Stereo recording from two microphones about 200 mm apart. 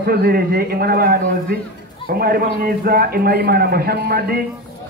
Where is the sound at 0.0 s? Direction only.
50° right (ahead or behind).